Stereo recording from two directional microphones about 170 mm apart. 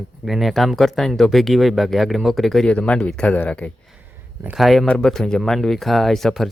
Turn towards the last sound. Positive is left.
turn(degrees=0)  # may be behind; listen again after turning